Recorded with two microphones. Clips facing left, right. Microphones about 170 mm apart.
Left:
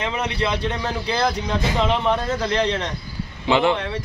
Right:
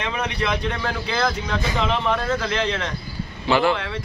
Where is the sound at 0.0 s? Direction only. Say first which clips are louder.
Left 1 dB; 25° left (ahead or behind).